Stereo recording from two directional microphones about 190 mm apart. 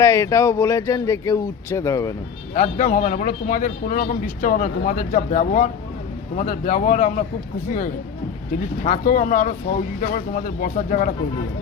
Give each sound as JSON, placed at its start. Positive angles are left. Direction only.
{"t": 0.0, "sound": "speech", "side_deg": 15}
{"t": 2.6, "sound": "speech", "side_deg": 40}
{"t": 8.8, "sound": "speech", "side_deg": 40}